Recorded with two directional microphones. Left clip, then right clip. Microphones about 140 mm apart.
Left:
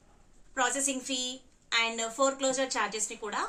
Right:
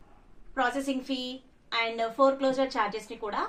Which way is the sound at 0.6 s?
40° left (ahead or behind).